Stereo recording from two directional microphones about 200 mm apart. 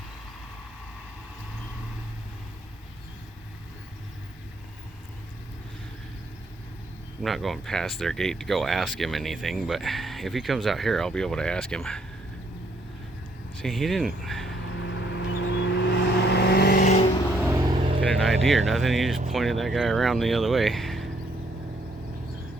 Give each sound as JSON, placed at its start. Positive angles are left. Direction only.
{"t": 7.2, "sound": "speech", "side_deg": 0}
{"t": 13.6, "sound": "speech", "side_deg": 0}
{"t": 14.8, "sound": "vehicle", "side_deg": 65}
{"t": 16.8, "sound": "vehicle", "side_deg": 35}
{"t": 17.4, "sound": "vehicle", "side_deg": -15}
{"t": 17.7, "sound": "vehicle", "side_deg": -30}
{"t": 18.0, "sound": "vehicle", "side_deg": 5}
{"t": 18.4, "sound": "speech", "side_deg": 0}